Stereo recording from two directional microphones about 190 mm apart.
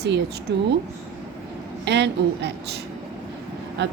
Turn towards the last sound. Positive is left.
turn(degrees=-70)  # may be behind; listen again after turning